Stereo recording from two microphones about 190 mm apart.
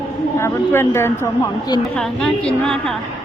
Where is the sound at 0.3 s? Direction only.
15° left (ahead or behind).